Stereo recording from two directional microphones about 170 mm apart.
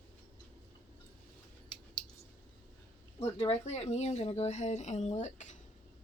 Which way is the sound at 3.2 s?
35° left (ahead or behind).